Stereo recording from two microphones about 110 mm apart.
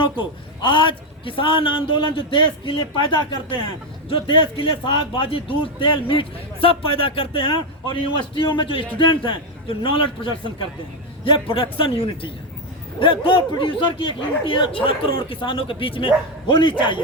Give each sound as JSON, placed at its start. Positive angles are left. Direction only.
{"t": 0.0, "sound": "a man's voice", "side_deg": 45}